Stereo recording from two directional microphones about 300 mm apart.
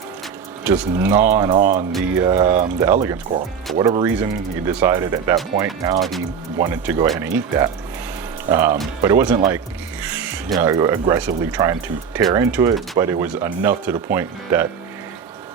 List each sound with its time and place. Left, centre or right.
0.6 s speech: centre
1.5 s speech: right
2.1 s speech: centre
6.0 s speech: centre